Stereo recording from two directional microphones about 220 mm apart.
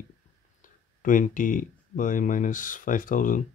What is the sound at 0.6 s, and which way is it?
Speech, 35° left (ahead or behind).